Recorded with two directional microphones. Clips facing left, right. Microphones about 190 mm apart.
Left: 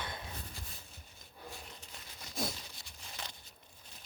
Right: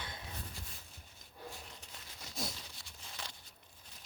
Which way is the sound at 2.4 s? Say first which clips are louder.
Left 5 dB; 55° left (ahead or behind).